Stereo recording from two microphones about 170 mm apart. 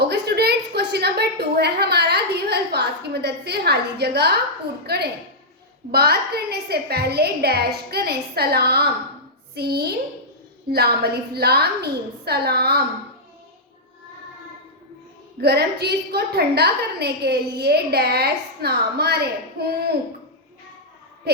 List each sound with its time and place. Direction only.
0.0 s a sound: 75° right (ahead or behind)
4.9 s a woman's voice: 75° right (ahead or behind)
15.4 s a woman's voice: 70° right (ahead or behind)